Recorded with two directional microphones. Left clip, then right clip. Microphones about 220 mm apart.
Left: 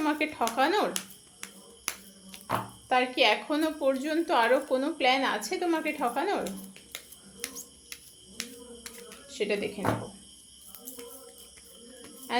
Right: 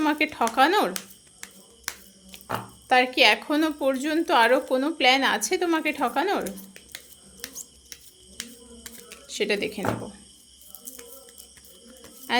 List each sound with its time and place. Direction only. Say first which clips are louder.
0.0 s a woman's voice: right 5 dB; 30° right (ahead or behind)
2.9 s a woman's voice: right 5 dB; 30° right (ahead or behind)
8.4 s a sound: even; 30° right (ahead or behind)
12.3 s speech: right 5 dB; 30° right (ahead or behind)